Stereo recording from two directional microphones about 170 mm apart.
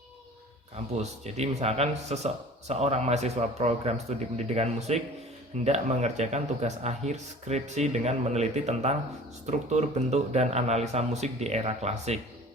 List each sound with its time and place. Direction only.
0.9 s speech: 40° right (ahead or behind)